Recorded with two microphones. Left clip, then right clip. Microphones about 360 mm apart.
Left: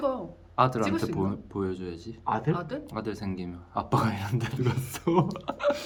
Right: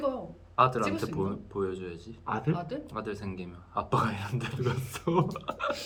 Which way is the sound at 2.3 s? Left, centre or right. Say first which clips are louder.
Left 4 dB; centre.